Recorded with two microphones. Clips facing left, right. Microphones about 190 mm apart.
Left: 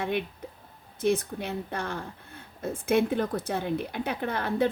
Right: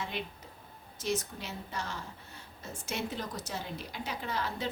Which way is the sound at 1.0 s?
55° left (ahead or behind).